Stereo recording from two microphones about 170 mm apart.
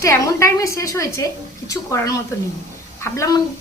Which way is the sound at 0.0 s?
15° left (ahead or behind).